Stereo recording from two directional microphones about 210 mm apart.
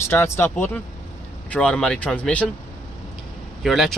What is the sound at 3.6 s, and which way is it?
Speech, centre (ahead or behind).